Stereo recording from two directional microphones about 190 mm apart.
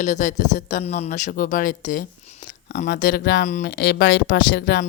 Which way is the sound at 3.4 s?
40° left (ahead or behind).